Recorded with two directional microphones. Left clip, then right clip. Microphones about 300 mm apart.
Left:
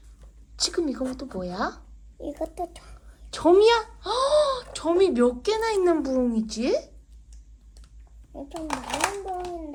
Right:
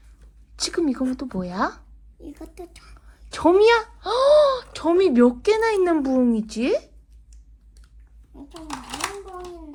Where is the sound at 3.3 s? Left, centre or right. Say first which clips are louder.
Right 2 dB; right.